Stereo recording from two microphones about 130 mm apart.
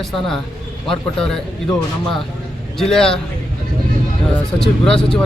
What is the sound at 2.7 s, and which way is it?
Speech, 5° left (ahead or behind).